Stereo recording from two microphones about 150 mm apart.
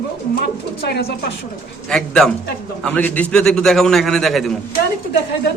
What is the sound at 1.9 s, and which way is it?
Speech, 5° left (ahead or behind).